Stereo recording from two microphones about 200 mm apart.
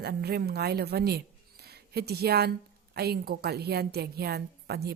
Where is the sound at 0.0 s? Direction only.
55° right (ahead or behind).